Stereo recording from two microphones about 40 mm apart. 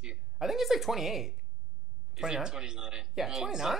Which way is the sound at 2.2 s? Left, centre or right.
Centre.